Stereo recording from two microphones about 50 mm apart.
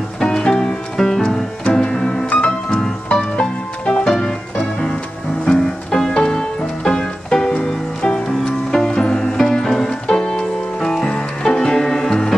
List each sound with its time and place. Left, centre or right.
0.2 s music: centre